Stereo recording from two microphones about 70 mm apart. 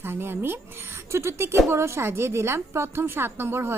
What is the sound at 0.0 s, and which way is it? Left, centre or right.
A woman's voice, right.